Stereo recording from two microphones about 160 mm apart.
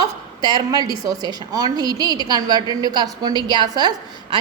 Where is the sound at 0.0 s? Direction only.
25° right (ahead or behind).